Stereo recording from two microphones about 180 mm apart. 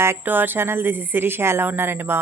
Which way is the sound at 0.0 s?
10° right (ahead or behind).